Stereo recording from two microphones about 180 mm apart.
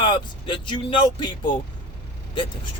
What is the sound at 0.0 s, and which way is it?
Speech, 25° left (ahead or behind).